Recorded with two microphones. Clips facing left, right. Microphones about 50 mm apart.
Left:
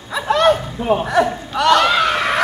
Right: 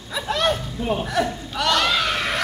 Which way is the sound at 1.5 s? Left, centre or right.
Centre.